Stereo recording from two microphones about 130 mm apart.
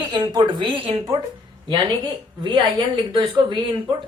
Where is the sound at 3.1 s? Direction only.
35° right (ahead or behind).